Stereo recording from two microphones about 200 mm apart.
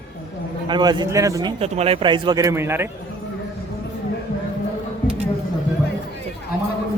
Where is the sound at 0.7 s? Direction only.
20° right (ahead or behind).